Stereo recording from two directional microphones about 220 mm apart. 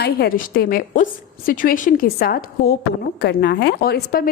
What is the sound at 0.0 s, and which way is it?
A woman's voice, 45° left (ahead or behind).